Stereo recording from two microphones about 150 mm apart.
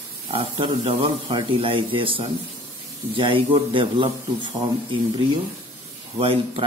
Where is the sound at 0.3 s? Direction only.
35° right (ahead or behind).